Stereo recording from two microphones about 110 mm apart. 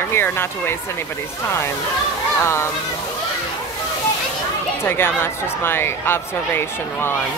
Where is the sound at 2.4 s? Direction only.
25° left (ahead or behind).